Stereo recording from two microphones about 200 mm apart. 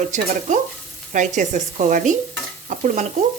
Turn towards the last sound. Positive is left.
turn(degrees=-35)  # may be behind; listen again after turning